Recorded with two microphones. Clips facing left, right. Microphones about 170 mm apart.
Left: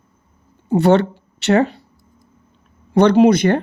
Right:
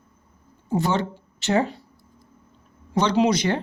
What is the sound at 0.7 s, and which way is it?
Speech, 65° left (ahead or behind).